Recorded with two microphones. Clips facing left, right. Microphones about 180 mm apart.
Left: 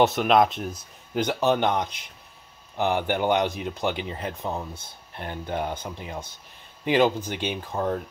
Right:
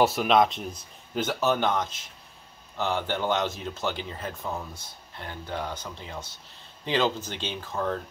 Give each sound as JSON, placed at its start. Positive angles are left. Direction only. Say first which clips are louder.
{"t": 0.0, "sound": "speech", "louder": "left 2 dB", "side_deg": 0}
{"t": 1.1, "sound": "speech", "louder": "left 3 dB", "side_deg": 15}